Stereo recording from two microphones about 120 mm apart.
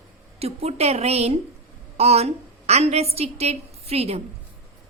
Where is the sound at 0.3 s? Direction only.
60° right (ahead or behind).